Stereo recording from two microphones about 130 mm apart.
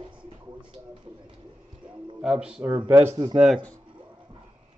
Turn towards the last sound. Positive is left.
turn(degrees=-5)  # may be behind; listen again after turning